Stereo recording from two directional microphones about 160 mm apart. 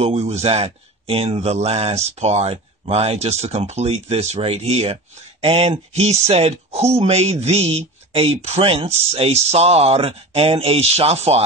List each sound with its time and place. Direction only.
0.0 s speech: 40° right (ahead or behind)